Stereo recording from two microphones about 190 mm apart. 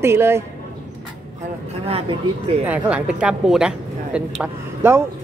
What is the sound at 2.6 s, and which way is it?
A woman's voice, 5° right (ahead or behind).